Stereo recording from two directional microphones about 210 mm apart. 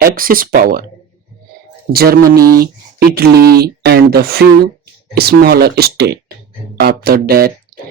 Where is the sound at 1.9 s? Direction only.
45° right (ahead or behind).